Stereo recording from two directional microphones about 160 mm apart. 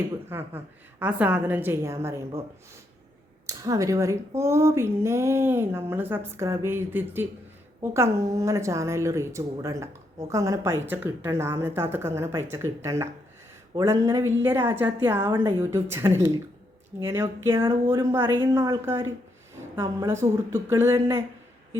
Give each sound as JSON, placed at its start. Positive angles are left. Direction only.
{"t": 0.3, "sound": "a woman's voice", "side_deg": -15}
{"t": 3.4, "sound": "a woman's voice", "side_deg": -20}